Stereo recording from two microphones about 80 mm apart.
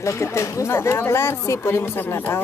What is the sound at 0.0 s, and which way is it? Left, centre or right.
Speech, left.